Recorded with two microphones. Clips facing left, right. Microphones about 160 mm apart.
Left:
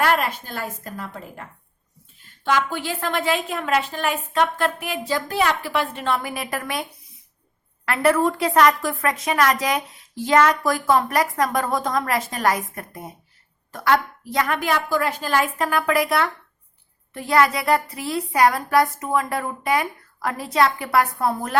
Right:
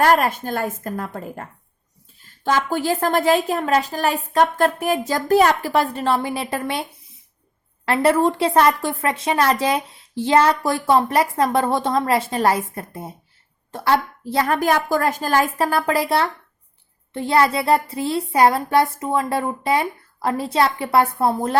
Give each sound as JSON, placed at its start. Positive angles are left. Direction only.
{"t": 0.0, "sound": "a woman's voice", "side_deg": -45}
{"t": 2.2, "sound": "a woman's voice", "side_deg": -40}
{"t": 7.9, "sound": "a woman's voice", "side_deg": -30}